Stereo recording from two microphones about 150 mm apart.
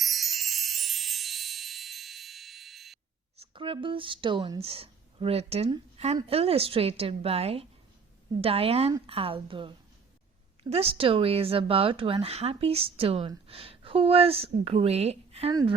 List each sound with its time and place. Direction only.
0.0 s music: centre (ahead or behind)
3.3 s speech: 40° right (ahead or behind)